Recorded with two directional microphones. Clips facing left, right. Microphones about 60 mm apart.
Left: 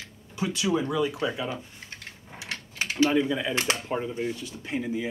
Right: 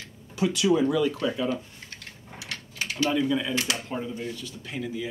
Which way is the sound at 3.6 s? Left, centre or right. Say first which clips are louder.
Left 2 dB; left.